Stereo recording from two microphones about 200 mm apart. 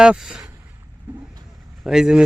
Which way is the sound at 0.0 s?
5° right (ahead or behind).